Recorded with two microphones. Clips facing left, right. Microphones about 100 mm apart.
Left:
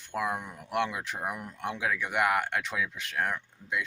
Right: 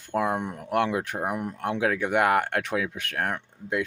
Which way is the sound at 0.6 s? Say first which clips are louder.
Right 4 dB; 45° right (ahead or behind).